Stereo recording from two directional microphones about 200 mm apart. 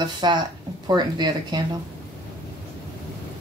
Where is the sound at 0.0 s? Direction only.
20° right (ahead or behind).